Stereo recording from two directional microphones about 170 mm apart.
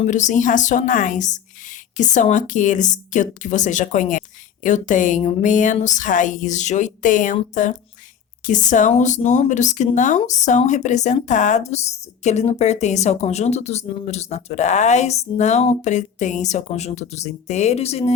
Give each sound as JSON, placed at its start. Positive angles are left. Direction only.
{"t": 0.0, "sound": "speech", "side_deg": 45}